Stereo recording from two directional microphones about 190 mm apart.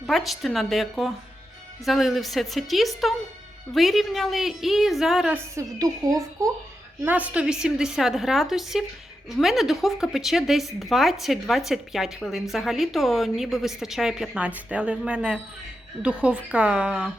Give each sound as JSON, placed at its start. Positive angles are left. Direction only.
{"t": 0.1, "sound": "a woman's voice", "side_deg": 0}
{"t": 5.5, "sound": "a woman's voice", "side_deg": -20}